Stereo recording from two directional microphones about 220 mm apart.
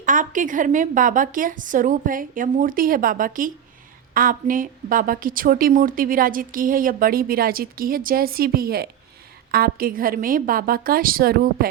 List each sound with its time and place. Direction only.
0.0 s a woman's voice: 35° right (ahead or behind)